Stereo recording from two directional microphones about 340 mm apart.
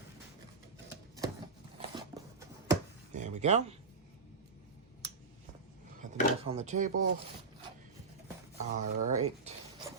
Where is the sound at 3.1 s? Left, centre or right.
Centre.